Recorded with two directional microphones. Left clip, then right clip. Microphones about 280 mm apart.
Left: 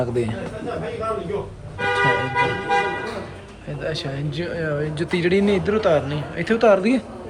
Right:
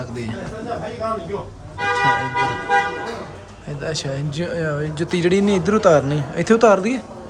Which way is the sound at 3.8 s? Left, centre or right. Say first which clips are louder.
Right 2 dB; centre.